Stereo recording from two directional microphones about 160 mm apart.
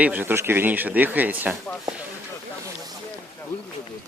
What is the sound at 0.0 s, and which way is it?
Speech, 10° right (ahead or behind).